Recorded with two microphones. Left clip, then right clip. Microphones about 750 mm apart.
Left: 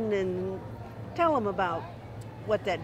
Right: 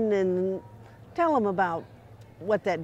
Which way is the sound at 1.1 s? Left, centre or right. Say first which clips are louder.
Right 2 dB; right.